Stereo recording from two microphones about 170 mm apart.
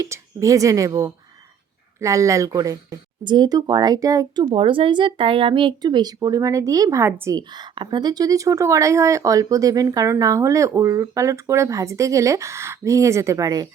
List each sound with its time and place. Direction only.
0.0 s speech: 15° right (ahead or behind)
4.5 s speech: 30° right (ahead or behind)